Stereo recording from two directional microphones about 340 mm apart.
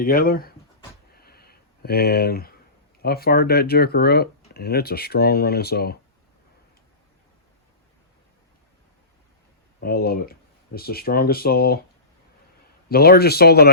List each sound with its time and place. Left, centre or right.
0.0 s speech: left
1.1 s a sound: left
3.0 s speech: left
9.8 s speech: left
12.9 s speech: left